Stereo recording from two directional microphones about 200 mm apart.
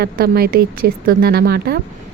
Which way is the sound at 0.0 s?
50° right (ahead or behind).